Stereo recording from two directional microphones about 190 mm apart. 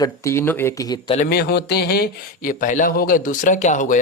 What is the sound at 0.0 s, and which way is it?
Speech, 15° left (ahead or behind).